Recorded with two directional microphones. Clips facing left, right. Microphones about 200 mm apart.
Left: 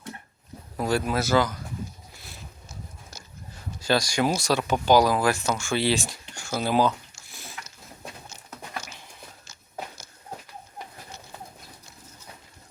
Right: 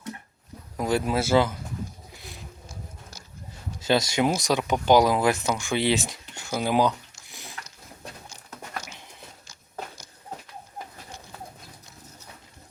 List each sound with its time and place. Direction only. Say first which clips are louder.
0.8 s speech: right 1 dB; 20° right (ahead or behind)
2.1 s a sound: right 3 dB; 15° right (ahead or behind)
3.8 s speech: right 1 dB; 20° right (ahead or behind)